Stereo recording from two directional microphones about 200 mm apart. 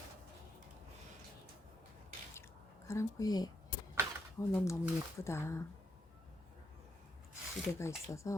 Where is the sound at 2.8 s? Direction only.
15° left (ahead or behind).